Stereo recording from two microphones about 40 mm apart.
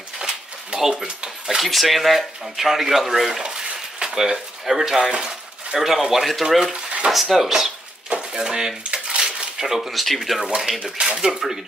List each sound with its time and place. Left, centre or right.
0.2 s a sound: centre
1.0 s speech: centre
1.6 s speech: centre
8.3 s dishes: centre
9.8 s speech: centre
10.8 s speech: centre